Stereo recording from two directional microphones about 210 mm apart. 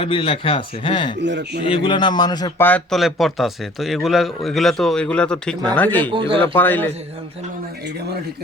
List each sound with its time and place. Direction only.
0.0 s speech: 25° left (ahead or behind)
1.2 s a man's voice: 55° right (ahead or behind)
1.6 s a man's voice: 25° left (ahead or behind); by 6.1 s 10° left (ahead or behind)
6.1 s speech: 25° right (ahead or behind)
6.5 s a man's voice: 10° left (ahead or behind)